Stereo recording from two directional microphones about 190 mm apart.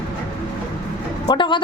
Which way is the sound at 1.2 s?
25° left (ahead or behind).